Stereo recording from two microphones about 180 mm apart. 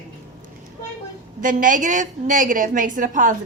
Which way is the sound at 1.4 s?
50° right (ahead or behind).